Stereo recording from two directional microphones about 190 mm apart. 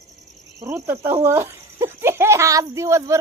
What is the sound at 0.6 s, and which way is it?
Speech, 15° right (ahead or behind).